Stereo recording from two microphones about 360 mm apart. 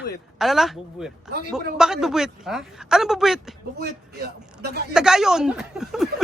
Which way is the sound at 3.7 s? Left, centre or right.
Right.